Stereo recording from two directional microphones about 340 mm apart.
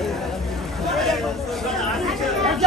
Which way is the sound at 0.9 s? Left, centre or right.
Centre.